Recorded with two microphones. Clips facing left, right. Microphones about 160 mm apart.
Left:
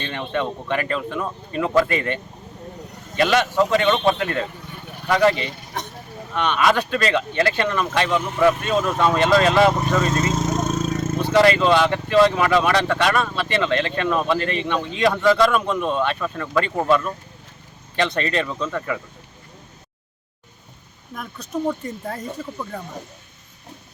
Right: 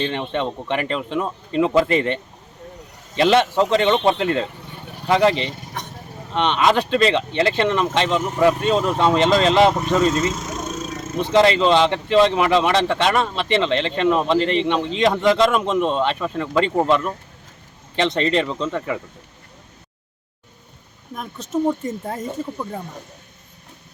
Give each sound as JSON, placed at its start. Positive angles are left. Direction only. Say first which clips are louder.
{"t": 0.0, "sound": "speech", "louder": "right 2 dB", "side_deg": -20}
{"t": 10.3, "sound": "a sound", "louder": "left 6 dB", "side_deg": 45}
{"t": 11.2, "sound": "speech", "louder": "right 1 dB", "side_deg": -25}
{"t": 21.2, "sound": "speech", "louder": "right 4 dB", "side_deg": -20}